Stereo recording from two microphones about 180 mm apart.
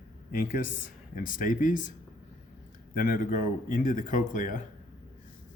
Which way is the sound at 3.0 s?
50° left (ahead or behind).